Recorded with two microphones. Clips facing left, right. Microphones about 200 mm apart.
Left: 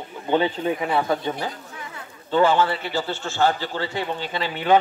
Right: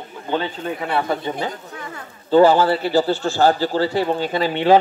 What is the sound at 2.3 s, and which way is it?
A man's voice, 35° right (ahead or behind).